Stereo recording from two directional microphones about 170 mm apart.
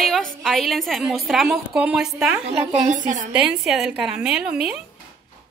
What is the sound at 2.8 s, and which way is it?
Speech, 45° right (ahead or behind).